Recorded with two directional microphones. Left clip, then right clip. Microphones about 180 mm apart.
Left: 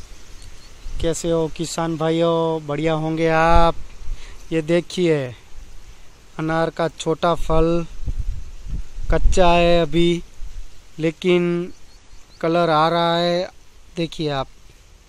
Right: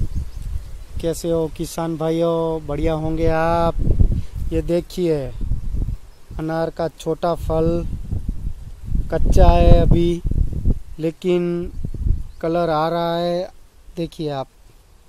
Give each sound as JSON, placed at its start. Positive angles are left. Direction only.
{"t": 0.9, "sound": "speech", "side_deg": -15}
{"t": 6.3, "sound": "speech", "side_deg": -5}
{"t": 9.1, "sound": "speech", "side_deg": -5}